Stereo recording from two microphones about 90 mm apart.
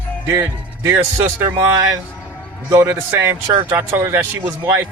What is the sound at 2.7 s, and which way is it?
Speech, 25° right (ahead or behind).